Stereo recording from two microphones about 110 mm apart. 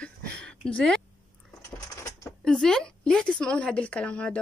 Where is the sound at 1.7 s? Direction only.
25° left (ahead or behind).